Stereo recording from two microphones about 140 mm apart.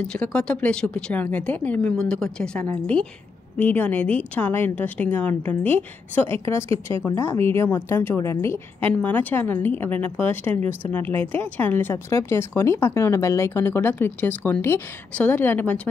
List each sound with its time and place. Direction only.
0.0 s speech: 5° left (ahead or behind)